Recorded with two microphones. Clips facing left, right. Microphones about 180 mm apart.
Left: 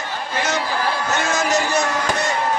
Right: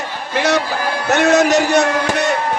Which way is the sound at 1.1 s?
65° right (ahead or behind).